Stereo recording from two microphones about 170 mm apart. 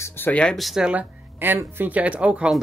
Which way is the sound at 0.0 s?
10° left (ahead or behind).